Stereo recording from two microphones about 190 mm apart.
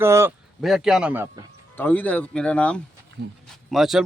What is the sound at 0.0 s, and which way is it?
Speech, 15° right (ahead or behind).